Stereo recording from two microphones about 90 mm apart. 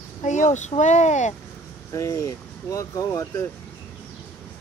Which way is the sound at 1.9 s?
35° left (ahead or behind).